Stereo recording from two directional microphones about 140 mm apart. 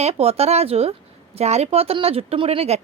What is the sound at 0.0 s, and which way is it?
A woman's voice, 45° right (ahead or behind).